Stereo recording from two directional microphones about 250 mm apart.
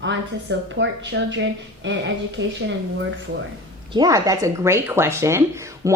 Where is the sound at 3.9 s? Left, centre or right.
Centre.